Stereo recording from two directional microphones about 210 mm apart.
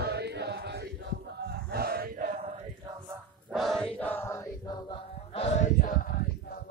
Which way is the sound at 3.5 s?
Centre (ahead or behind).